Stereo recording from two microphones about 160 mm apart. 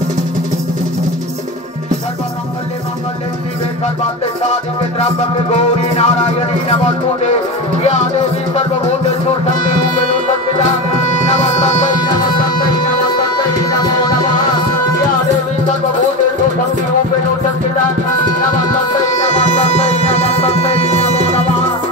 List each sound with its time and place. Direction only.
5.0 s music: 40° left (ahead or behind)
11.0 s music: 45° left (ahead or behind)
19.0 s music: 40° left (ahead or behind)